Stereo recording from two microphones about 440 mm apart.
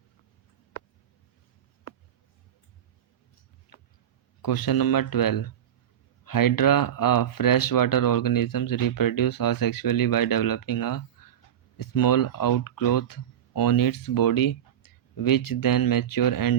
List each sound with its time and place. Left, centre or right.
4.4 s speech: left